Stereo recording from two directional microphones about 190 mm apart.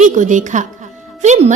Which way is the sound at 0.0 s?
40° right (ahead or behind).